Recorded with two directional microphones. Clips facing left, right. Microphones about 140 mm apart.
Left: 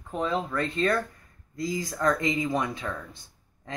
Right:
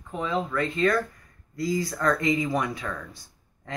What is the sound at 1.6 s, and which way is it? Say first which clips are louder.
Speech: right 2 dB; 20° left (ahead or behind).